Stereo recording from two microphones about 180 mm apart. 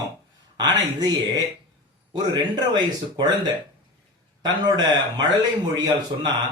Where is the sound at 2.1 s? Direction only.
25° right (ahead or behind).